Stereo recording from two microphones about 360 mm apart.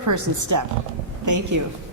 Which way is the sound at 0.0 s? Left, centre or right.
Right.